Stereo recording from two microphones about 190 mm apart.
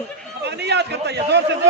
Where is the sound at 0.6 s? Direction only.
60° right (ahead or behind).